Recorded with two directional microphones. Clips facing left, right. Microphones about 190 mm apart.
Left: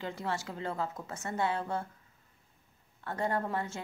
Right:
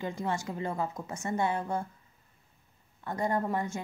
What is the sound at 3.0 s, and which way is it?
Speech, 15° right (ahead or behind).